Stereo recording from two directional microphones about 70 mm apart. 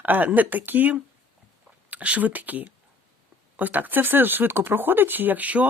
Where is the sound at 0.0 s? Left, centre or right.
Right.